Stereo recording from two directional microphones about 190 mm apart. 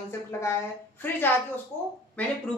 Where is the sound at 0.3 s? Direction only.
15° left (ahead or behind).